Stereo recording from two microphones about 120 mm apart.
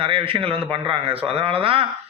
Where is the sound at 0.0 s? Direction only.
50° right (ahead or behind).